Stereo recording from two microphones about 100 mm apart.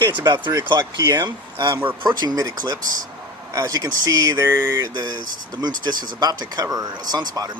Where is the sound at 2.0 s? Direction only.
45° right (ahead or behind).